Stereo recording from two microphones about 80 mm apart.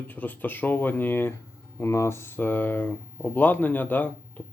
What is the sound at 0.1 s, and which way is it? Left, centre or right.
Speech, left.